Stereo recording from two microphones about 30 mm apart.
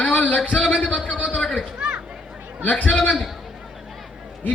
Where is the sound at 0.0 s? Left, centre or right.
Left.